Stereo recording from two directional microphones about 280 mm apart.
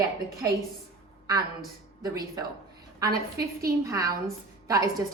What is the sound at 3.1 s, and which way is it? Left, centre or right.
Speech, right.